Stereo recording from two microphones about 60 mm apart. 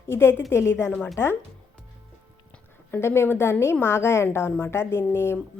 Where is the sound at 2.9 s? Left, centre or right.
Left.